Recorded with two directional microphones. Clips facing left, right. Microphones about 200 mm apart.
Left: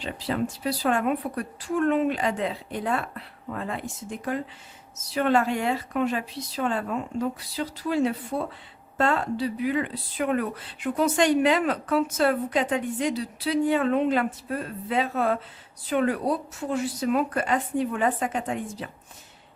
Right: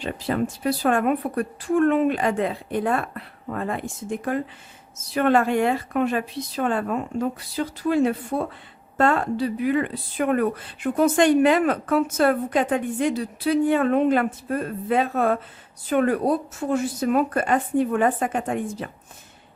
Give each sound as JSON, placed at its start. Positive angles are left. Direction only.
{"t": 0.0, "sound": "speech", "side_deg": -50}